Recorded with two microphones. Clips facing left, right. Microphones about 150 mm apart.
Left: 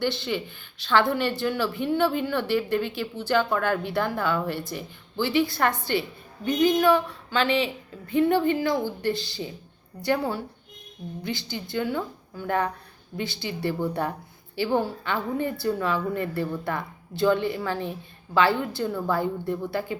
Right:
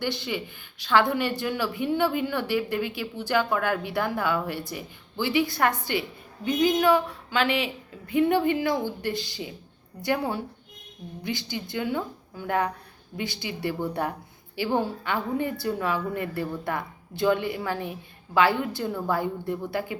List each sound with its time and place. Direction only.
0.0 s a woman's voice: 10° right (ahead or behind)